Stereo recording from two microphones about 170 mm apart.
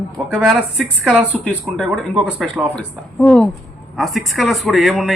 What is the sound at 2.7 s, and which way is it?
A woman's voice, 5° left (ahead or behind).